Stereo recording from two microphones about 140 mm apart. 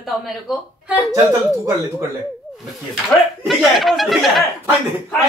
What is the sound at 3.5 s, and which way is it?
Speech, centre (ahead or behind).